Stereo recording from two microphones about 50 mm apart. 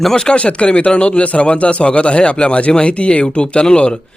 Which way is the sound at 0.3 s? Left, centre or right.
Left.